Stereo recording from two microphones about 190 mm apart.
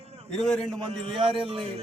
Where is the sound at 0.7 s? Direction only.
25° right (ahead or behind).